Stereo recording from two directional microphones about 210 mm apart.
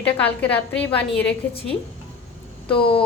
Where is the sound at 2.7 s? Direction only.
25° left (ahead or behind).